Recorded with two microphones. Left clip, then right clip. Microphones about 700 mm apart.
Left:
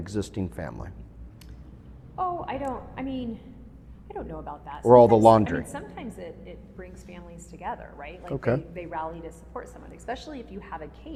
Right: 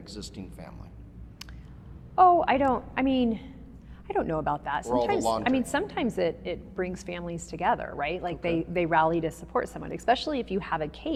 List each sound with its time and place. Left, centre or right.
0.0 s speech: left
2.1 s a woman's voice: right
4.9 s speech: left
5.4 s a woman's voice: right